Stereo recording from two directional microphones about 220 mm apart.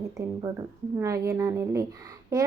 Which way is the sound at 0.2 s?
15° right (ahead or behind).